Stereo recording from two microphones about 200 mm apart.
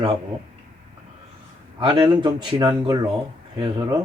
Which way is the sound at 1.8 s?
20° right (ahead or behind).